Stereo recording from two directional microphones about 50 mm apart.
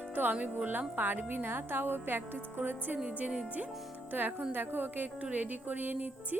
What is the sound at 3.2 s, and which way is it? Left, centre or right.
Speech, right.